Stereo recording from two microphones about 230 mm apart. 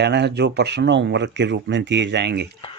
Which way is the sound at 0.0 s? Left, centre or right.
Right.